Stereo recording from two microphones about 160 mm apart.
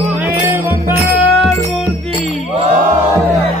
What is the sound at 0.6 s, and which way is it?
Music, 15° right (ahead or behind).